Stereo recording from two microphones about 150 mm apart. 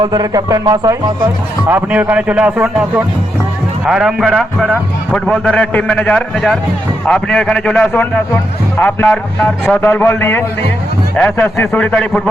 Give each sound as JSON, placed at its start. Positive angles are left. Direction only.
{"t": 0.0, "sound": "speech", "side_deg": -25}
{"t": 1.6, "sound": "a man's voice", "side_deg": -10}